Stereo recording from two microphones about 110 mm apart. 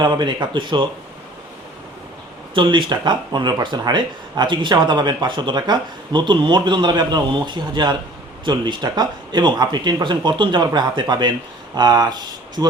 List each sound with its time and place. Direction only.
0.0 s speech: 40° right (ahead or behind)
2.6 s speech: 45° right (ahead or behind)